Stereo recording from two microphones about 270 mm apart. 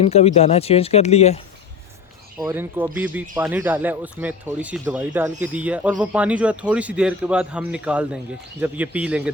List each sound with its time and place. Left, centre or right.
0.0 s speech: left
2.4 s speech: centre